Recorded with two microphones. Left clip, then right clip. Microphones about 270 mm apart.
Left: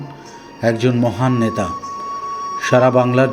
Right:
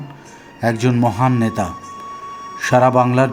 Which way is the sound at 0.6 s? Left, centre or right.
Centre.